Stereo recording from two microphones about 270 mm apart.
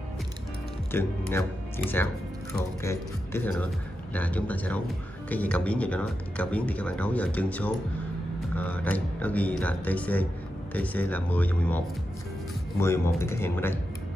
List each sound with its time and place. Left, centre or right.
0.9 s speech: centre
2.8 s speech: centre
12.8 s speech: centre